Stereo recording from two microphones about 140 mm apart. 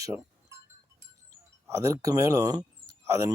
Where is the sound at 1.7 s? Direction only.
20° right (ahead or behind).